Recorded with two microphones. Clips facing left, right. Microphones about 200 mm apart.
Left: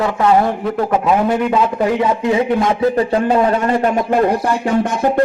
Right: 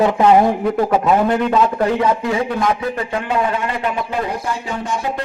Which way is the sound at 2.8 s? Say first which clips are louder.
Left 8 dB; 35° left (ahead or behind).